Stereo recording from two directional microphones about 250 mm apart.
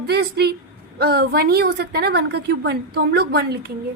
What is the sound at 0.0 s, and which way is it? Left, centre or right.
A woman's voice, right.